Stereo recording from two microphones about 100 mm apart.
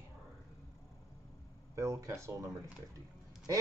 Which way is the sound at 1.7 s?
30° right (ahead or behind).